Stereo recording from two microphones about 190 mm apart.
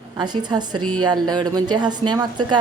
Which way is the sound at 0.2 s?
20° right (ahead or behind).